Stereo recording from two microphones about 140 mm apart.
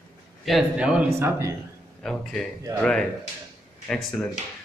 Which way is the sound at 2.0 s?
5° left (ahead or behind).